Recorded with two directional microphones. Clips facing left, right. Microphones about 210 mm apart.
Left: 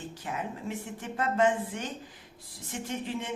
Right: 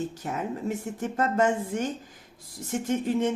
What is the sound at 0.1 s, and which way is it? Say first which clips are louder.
A woman's voice: right 5 dB; 45° right (ahead or behind).